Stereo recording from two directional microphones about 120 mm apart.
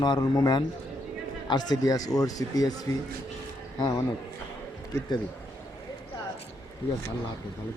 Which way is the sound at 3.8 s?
35° left (ahead or behind).